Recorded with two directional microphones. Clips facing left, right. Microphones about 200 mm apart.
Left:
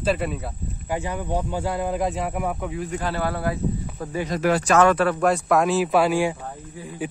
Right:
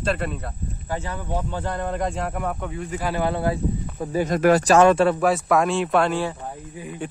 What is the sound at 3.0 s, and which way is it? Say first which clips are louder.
Speech: right 4 dB; 20° right (ahead or behind).